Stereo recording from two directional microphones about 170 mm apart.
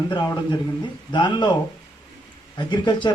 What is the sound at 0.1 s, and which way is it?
A man's voice, 20° left (ahead or behind).